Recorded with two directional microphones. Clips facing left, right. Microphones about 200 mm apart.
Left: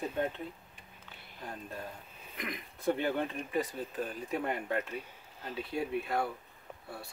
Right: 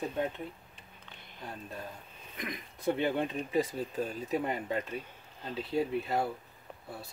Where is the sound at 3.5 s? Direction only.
25° right (ahead or behind).